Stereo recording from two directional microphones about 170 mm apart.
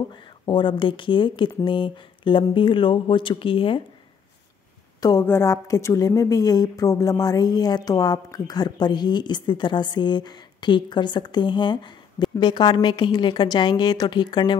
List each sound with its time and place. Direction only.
0.1 s a woman's voice: 30° left (ahead or behind)
5.0 s a woman's voice: 15° left (ahead or behind)